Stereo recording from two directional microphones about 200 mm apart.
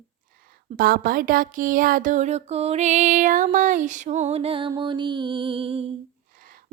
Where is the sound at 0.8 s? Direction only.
45° right (ahead or behind); by 4.7 s 30° right (ahead or behind).